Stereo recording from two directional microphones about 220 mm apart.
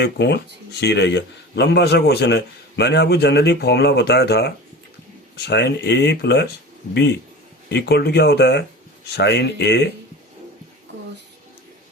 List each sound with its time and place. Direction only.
0.0 s speech: 50° left (ahead or behind)
7.7 s speech: 50° left (ahead or behind)